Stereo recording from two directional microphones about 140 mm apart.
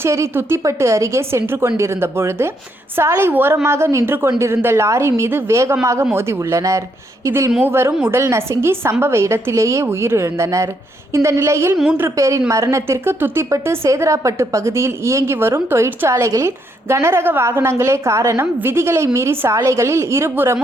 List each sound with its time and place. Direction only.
0.0 s a woman's voice: 20° right (ahead or behind)